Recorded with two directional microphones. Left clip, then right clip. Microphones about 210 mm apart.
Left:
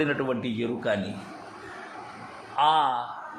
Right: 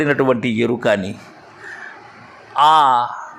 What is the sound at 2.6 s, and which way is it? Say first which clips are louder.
Speech: right 11 dB; 25° right (ahead or behind).